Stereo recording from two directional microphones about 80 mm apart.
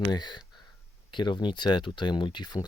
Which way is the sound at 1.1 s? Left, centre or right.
Left.